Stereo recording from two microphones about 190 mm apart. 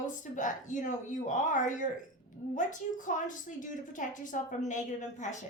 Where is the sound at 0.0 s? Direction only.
40° left (ahead or behind).